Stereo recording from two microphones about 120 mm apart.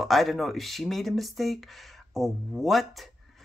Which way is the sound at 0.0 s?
Centre (ahead or behind).